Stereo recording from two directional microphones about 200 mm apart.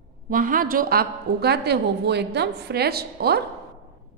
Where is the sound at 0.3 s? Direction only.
45° right (ahead or behind).